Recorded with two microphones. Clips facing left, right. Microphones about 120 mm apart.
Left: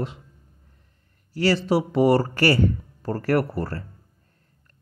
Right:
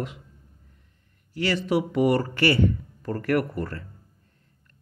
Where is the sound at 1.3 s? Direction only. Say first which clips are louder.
Left 3 dB; 35° left (ahead or behind).